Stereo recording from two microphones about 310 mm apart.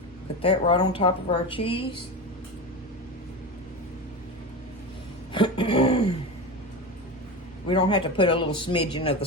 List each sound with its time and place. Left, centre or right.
0.4 s a man's voice: centre
5.3 s a sound: centre
7.7 s a man's voice: centre